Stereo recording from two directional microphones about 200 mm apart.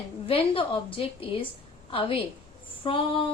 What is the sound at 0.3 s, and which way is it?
A woman's voice, 30° left (ahead or behind).